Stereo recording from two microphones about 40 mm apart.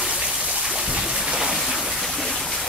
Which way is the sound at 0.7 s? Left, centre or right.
Right.